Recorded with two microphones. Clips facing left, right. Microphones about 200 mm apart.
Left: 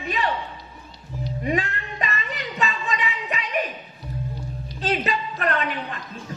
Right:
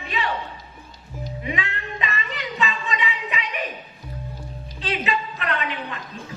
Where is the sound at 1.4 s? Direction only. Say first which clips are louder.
Left 5 dB; 45° left (ahead or behind).